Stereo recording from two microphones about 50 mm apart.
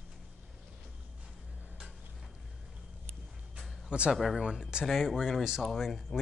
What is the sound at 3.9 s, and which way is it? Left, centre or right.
Speech, centre.